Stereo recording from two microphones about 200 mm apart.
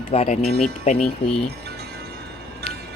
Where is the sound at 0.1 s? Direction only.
35° left (ahead or behind).